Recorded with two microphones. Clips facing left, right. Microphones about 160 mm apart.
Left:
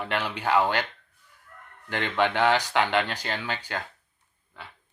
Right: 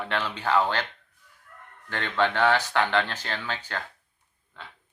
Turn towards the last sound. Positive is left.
turn(degrees=10)  # may be behind; listen again after turning